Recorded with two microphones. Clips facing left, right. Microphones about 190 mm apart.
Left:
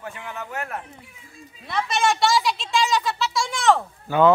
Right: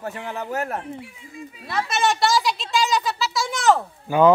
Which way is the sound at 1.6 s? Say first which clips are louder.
Even; centre (ahead or behind).